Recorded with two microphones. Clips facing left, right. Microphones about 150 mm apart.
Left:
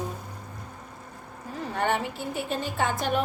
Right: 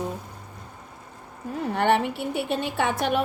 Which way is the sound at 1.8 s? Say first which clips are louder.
Right 5 dB; 70° right (ahead or behind).